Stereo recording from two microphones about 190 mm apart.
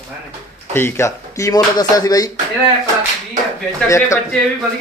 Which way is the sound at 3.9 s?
15° left (ahead or behind).